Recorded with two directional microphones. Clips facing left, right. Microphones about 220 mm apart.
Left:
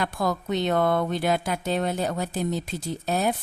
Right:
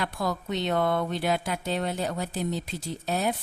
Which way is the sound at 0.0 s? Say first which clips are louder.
Left 3 dB; 45° left (ahead or behind).